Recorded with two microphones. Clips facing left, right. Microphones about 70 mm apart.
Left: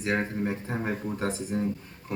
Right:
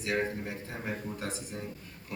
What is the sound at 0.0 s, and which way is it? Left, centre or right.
Speech, left.